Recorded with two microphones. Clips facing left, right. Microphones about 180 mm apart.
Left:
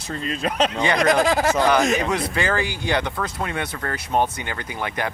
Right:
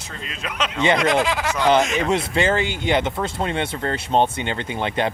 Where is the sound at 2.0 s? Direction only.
25° right (ahead or behind).